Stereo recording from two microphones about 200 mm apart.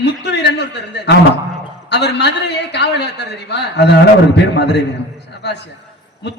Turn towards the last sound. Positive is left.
turn(degrees=60)  # may be behind; listen again after turning